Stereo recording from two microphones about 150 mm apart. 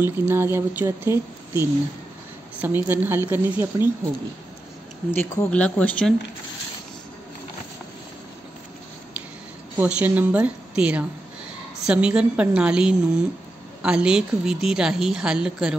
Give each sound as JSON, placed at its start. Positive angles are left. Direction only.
{"t": 0.3, "sound": "a woman's voice", "side_deg": -15}
{"t": 5.1, "sound": "speech", "side_deg": 15}
{"t": 9.8, "sound": "a woman's voice", "side_deg": -10}